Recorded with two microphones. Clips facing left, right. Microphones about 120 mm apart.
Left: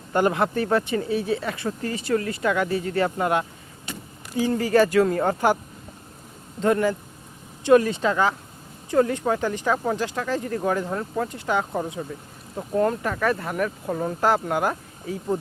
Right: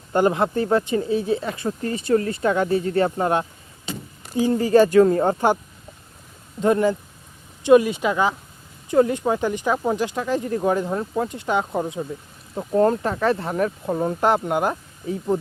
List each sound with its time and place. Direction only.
0.1 s speech: 25° right (ahead or behind)
6.6 s speech: 20° right (ahead or behind)
12.7 s speech: 30° right (ahead or behind)